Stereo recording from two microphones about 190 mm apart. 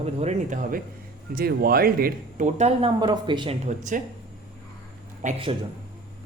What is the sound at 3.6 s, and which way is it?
Speech, 40° right (ahead or behind).